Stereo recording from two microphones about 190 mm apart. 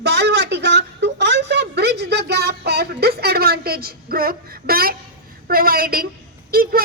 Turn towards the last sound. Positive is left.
turn(degrees=-50)  # may be behind; listen again after turning